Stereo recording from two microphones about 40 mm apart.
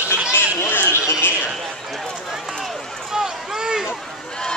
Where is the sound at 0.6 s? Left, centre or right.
Left.